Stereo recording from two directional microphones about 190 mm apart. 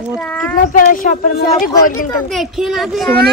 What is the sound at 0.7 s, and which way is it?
Speech, 45° left (ahead or behind).